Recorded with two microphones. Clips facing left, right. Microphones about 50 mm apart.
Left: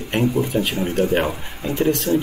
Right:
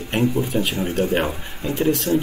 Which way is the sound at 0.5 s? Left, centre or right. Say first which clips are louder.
Left 1 dB; centre.